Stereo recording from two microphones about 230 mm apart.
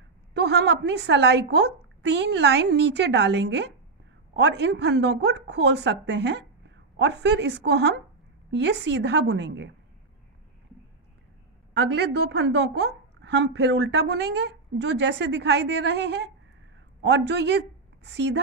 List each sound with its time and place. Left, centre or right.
0.3 s a woman's voice: right
11.7 s a woman's voice: right